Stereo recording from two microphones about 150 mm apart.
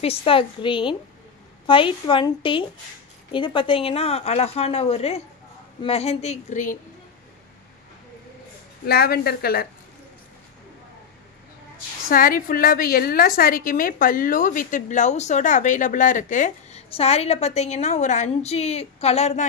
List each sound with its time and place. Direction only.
0.0 s a woman's voice: 40° left (ahead or behind); by 6.8 s 55° left (ahead or behind)
8.8 s a woman's voice: 90° left
12.1 s a woman's voice: 70° left (ahead or behind)
16.9 s a woman's voice: 45° left (ahead or behind)